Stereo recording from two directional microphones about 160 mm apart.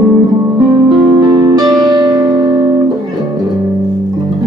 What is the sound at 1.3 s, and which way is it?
Music, 25° right (ahead or behind).